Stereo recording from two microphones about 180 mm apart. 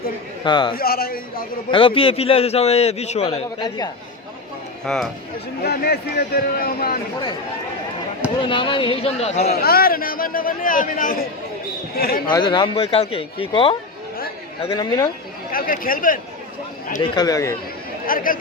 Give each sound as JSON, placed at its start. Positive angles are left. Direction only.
{"t": 0.4, "sound": "speech", "side_deg": 25}
{"t": 0.8, "sound": "a man's voice", "side_deg": 55}
{"t": 1.7, "sound": "a man's voice", "side_deg": 30}
{"t": 4.9, "sound": "speech", "side_deg": 5}
{"t": 5.6, "sound": "a man's voice", "side_deg": 60}
{"t": 8.4, "sound": "a man's voice", "side_deg": 30}
{"t": 9.6, "sound": "a man's voice", "side_deg": 55}
{"t": 12.3, "sound": "speech", "side_deg": 25}
{"t": 15.5, "sound": "a man's voice", "side_deg": 50}
{"t": 17.0, "sound": "speech", "side_deg": 20}
{"t": 18.0, "sound": "speech", "side_deg": 50}